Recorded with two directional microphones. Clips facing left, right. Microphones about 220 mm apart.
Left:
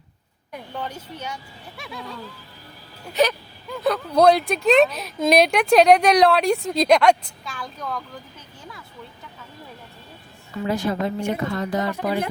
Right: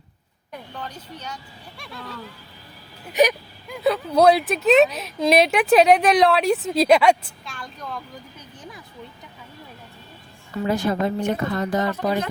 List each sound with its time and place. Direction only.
0.8 s speech: 10° left (ahead or behind)
3.1 s wail: 15° right (ahead or behind)
3.8 s speech: 5° right (ahead or behind)
10.7 s a woman's voice: 45° right (ahead or behind)